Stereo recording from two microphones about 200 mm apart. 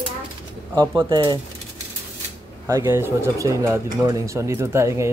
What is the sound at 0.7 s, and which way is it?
Speech, 20° right (ahead or behind).